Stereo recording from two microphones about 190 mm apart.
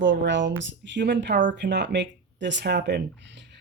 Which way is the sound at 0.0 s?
75° right (ahead or behind).